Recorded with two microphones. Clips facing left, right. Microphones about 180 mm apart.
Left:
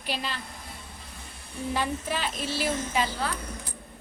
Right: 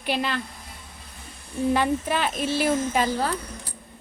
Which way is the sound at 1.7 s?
60° right (ahead or behind).